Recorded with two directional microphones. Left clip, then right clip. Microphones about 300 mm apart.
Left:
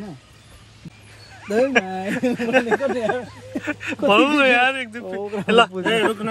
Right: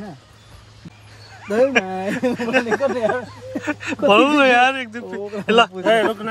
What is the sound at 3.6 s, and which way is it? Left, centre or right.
Speech, centre.